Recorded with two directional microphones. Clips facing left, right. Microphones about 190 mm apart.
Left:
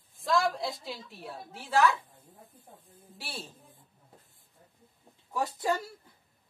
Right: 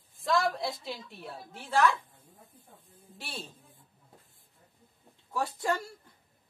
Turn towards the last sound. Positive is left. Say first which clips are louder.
# left 1 dB
turn(degrees=20)  # may be behind; listen again after turning